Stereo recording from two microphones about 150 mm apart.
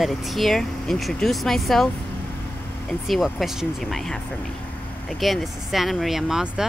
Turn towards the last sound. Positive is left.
turn(degrees=-5)  # may be behind; listen again after turning